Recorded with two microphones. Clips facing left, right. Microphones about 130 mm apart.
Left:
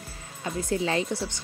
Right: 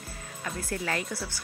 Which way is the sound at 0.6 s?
20° left (ahead or behind).